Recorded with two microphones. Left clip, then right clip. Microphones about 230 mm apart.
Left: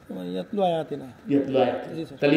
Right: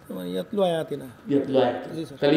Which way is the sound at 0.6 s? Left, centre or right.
Right.